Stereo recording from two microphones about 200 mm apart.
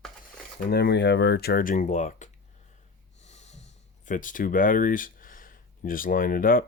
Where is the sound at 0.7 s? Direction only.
55° left (ahead or behind); by 2.3 s 35° left (ahead or behind).